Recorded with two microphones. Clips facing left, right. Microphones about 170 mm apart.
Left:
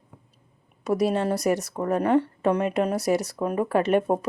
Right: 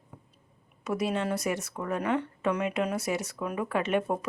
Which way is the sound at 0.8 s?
35° left (ahead or behind).